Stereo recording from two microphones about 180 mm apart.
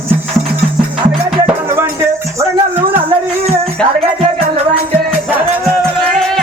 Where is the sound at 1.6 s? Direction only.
15° right (ahead or behind).